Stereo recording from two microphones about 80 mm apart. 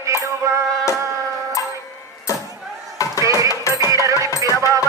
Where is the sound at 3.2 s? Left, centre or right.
Right.